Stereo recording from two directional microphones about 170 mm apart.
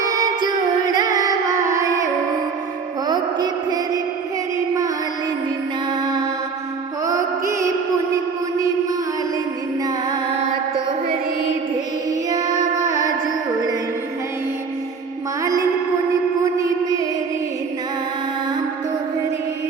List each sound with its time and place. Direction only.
0.0 s music: 20° right (ahead or behind)
3.1 s a sound: 25° right (ahead or behind)
7.0 s music: 20° right (ahead or behind)
12.3 s carnatic music: 20° right (ahead or behind)
16.6 s mantra: 20° right (ahead or behind)